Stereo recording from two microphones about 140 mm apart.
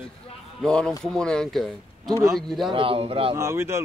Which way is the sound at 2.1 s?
25° right (ahead or behind).